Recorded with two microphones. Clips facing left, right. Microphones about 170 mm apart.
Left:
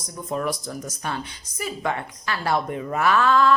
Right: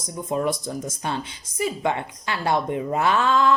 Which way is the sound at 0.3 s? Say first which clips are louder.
Right 2 dB; 20° right (ahead or behind).